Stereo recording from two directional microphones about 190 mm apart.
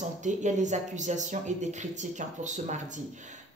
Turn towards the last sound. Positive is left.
turn(degrees=-40)  # may be behind; listen again after turning